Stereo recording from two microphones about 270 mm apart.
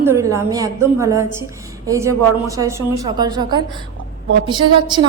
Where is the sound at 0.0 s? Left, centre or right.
Centre.